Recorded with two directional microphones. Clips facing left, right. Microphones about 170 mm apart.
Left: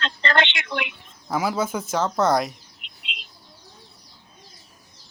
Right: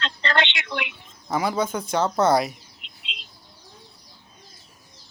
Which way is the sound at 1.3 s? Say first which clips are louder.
Even; 5° left (ahead or behind).